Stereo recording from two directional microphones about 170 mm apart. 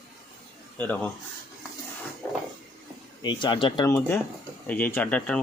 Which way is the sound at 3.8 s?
10° left (ahead or behind).